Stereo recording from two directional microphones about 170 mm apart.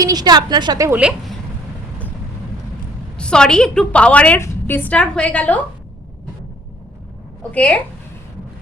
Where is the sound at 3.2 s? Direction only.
5° left (ahead or behind).